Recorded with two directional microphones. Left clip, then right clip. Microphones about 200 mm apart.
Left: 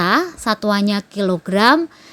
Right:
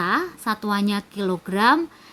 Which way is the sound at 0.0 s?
30° left (ahead or behind).